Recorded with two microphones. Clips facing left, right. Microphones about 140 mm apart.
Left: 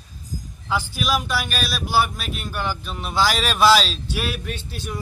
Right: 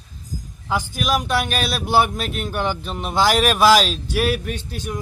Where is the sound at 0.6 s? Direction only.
15° right (ahead or behind).